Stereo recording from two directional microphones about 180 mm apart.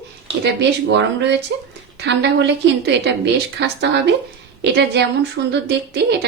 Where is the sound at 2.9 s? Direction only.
70° right (ahead or behind).